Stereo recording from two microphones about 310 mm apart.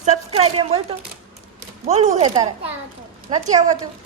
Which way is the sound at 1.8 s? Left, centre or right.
Right.